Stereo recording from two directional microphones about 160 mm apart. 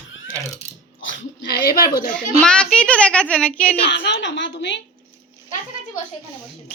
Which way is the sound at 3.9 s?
90° left.